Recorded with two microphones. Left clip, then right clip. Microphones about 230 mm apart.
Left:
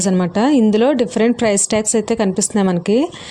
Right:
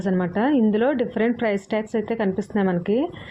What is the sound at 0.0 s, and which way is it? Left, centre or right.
Speech, left.